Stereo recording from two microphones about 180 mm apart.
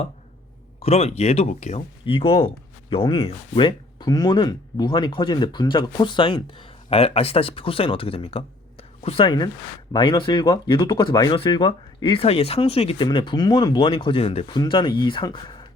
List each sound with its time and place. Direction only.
0.8 s speech: 35° left (ahead or behind)